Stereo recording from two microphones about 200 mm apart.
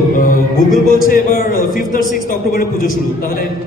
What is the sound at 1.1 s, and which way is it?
A woman's voice, 45° left (ahead or behind).